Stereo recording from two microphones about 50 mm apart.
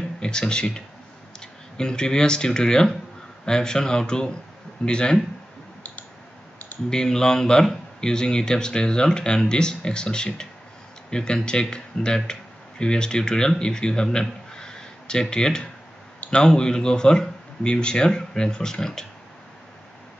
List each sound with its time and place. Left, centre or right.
0.2 s a man's voice: centre
6.9 s a man's voice: centre
14.5 s a sound: centre
16.3 s a man's voice: centre